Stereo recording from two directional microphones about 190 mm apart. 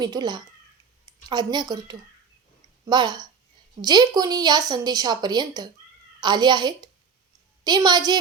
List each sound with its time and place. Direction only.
0.0 s a woman's voice: 20° right (ahead or behind)